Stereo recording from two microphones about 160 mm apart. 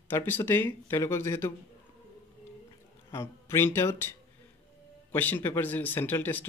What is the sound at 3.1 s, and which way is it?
Speech, 15° left (ahead or behind).